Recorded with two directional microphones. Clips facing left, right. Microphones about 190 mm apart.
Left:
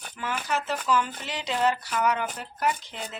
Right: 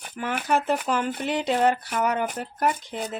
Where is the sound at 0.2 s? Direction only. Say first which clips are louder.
Right 5 dB; 55° right (ahead or behind).